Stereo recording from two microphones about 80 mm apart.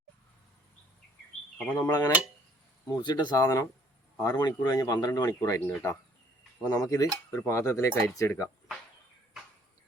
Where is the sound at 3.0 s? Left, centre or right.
Left.